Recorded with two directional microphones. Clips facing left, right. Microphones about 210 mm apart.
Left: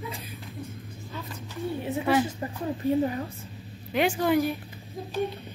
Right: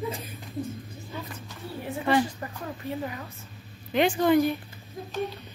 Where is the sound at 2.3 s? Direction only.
25° left (ahead or behind).